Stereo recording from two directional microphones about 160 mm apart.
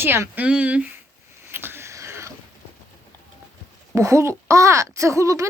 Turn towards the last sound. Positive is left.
turn(degrees=-20)  # may be behind; listen again after turning